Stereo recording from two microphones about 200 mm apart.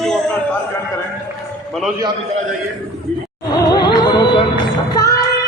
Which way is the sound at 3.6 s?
20° left (ahead or behind).